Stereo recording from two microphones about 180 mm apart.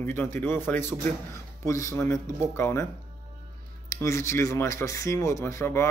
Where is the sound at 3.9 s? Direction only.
15° left (ahead or behind).